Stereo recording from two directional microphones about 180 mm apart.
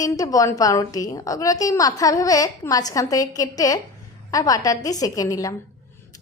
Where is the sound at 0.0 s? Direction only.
20° left (ahead or behind).